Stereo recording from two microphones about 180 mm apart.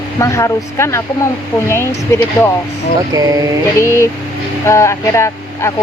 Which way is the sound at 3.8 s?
15° left (ahead or behind).